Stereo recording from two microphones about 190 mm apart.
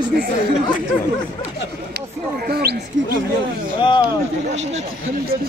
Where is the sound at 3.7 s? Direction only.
25° left (ahead or behind).